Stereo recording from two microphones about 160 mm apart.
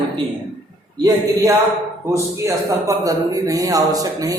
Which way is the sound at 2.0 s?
20° right (ahead or behind).